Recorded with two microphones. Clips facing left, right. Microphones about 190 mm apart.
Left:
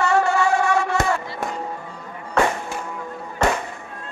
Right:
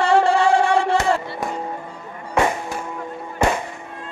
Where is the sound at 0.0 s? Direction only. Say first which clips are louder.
Right 3 dB; 30° right (ahead or behind).